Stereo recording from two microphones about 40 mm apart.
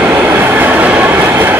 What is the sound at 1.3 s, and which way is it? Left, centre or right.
Vehicle, right.